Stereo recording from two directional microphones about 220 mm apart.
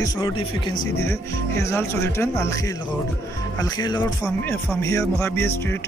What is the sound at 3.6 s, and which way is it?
Speech, 15° left (ahead or behind).